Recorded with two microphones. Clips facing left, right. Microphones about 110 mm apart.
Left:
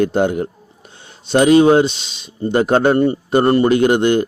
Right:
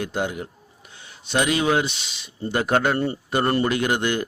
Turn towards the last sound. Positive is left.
turn(degrees=25)  # may be behind; listen again after turning